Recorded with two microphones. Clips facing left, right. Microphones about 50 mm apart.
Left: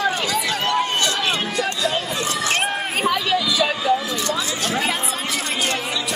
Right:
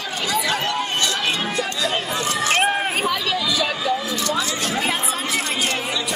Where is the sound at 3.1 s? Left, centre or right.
Centre.